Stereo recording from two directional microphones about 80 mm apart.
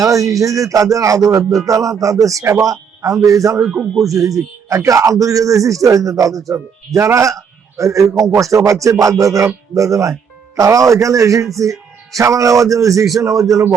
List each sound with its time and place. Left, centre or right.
0.0 s a man's voice: right
3.6 s speech: centre
4.0 s a man's voice: right